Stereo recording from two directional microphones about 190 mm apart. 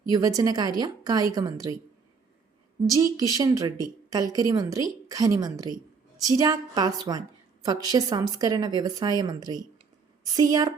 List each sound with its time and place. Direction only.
0.1 s a woman's voice: 20° right (ahead or behind)
2.8 s a woman's voice: 20° right (ahead or behind)